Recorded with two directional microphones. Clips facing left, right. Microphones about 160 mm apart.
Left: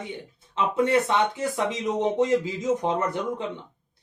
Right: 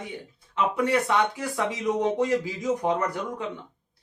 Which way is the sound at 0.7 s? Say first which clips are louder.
Left 2 dB; 25° left (ahead or behind).